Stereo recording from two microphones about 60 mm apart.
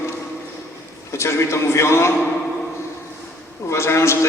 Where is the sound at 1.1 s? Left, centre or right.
Left.